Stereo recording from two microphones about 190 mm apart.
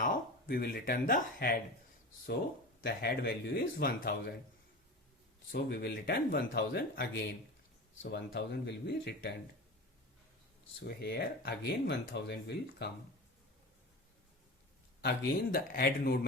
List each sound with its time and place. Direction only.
0.0 s speech: 50° left (ahead or behind)
2.8 s speech: 55° left (ahead or behind)
5.5 s speech: 55° left (ahead or behind)
10.8 s speech: 60° left (ahead or behind)
15.0 s speech: 55° left (ahead or behind)